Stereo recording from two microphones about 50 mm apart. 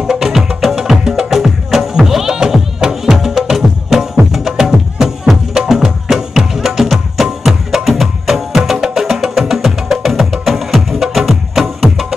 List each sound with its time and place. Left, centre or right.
0.0 s music: centre